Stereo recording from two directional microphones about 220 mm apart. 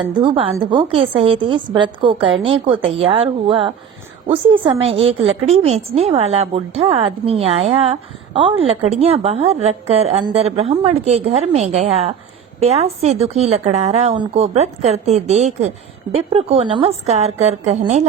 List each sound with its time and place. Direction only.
0.0 s a woman's voice: 20° right (ahead or behind)